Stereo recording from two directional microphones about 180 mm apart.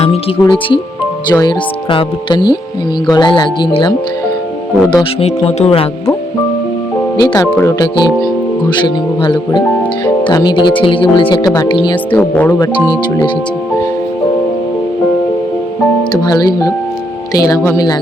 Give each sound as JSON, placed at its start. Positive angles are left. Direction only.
{"t": 0.0, "sound": "speech", "side_deg": 30}
{"t": 5.2, "sound": "speech", "side_deg": 35}
{"t": 7.2, "sound": "speech", "side_deg": 25}
{"t": 12.1, "sound": "speech", "side_deg": 10}
{"t": 12.9, "sound": "speech", "side_deg": 20}
{"t": 16.2, "sound": "speech", "side_deg": 20}